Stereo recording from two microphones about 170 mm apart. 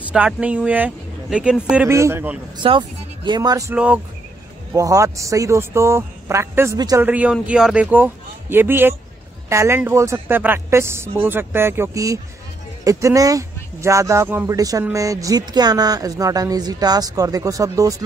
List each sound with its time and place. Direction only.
0.0 s a woman's voice: 10° right (ahead or behind)
2.5 s speech: 30° right (ahead or behind)
3.7 s a woman's voice: 5° right (ahead or behind)
4.7 s a woman's voice: 20° right (ahead or behind)
7.1 s a woman's voice: 10° right (ahead or behind)